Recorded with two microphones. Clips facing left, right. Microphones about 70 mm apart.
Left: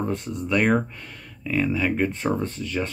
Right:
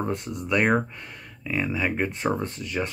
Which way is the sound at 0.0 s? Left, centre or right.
Centre.